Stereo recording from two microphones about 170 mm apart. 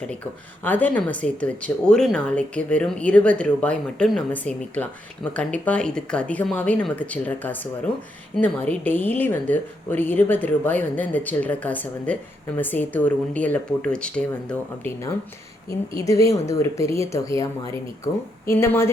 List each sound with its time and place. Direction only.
0.6 s speech: 10° left (ahead or behind)
16.0 s speech: 20° left (ahead or behind)
18.5 s speech: 15° left (ahead or behind)